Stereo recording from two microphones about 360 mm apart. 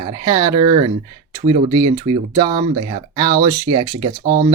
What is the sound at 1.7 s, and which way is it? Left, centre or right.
Speech, right.